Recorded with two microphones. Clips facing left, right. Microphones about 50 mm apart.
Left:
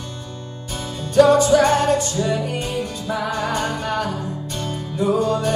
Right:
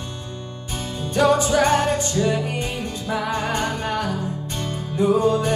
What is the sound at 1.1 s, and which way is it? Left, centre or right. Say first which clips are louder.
Music: left 5 dB; right.